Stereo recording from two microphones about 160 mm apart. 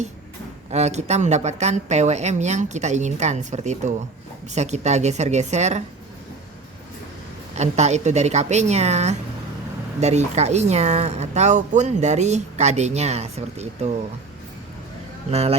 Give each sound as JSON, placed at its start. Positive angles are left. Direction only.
{"t": 0.7, "sound": "speech", "side_deg": -45}
{"t": 7.5, "sound": "speech", "side_deg": -45}
{"t": 15.3, "sound": "speech", "side_deg": -40}